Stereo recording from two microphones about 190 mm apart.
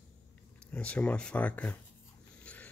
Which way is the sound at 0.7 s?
5° left (ahead or behind).